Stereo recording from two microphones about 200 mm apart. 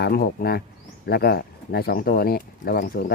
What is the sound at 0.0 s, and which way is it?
Speech, 50° left (ahead or behind).